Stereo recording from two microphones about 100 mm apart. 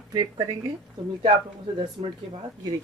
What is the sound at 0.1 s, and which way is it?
Speech, 40° right (ahead or behind).